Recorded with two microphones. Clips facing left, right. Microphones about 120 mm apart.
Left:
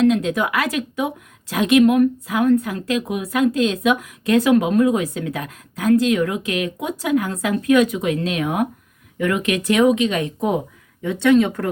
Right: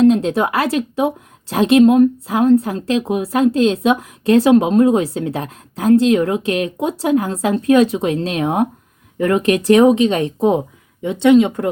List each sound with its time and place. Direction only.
0.0 s a woman's voice: 30° right (ahead or behind)